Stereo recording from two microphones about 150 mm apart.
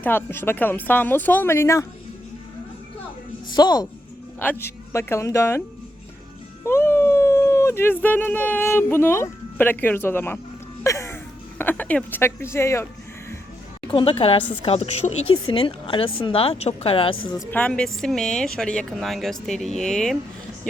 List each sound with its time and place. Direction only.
0.0 s speech: 15° left (ahead or behind)
3.5 s speech: 25° left (ahead or behind)
4.4 s speech: 15° left (ahead or behind)
6.7 s speech: 15° left (ahead or behind)
10.8 s a sound: 20° left (ahead or behind)
13.9 s a woman's voice: 35° left (ahead or behind)
17.5 s speech: 10° left (ahead or behind)